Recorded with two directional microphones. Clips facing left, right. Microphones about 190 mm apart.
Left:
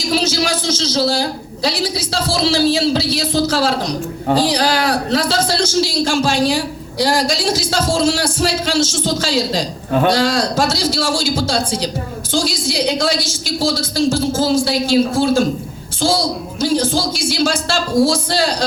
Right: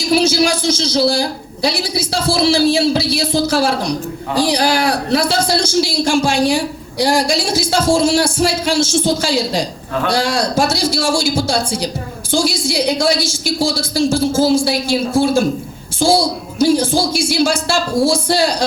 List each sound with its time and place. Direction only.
0.2 s a woman's voice: 10° right (ahead or behind)